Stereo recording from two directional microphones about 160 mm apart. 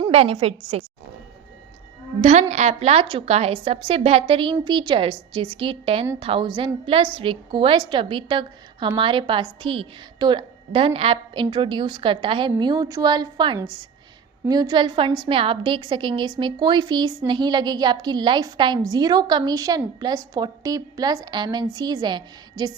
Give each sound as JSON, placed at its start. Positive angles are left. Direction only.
{"t": 0.1, "sound": "a woman's voice", "side_deg": -40}
{"t": 2.2, "sound": "a woman's voice", "side_deg": -45}